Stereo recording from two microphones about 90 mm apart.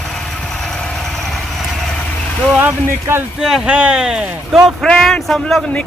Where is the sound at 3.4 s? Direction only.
5° right (ahead or behind).